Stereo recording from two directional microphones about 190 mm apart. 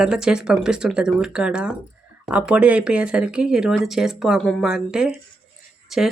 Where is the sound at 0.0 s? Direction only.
5° right (ahead or behind).